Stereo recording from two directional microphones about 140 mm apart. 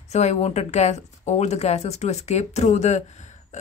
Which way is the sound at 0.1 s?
55° left (ahead or behind).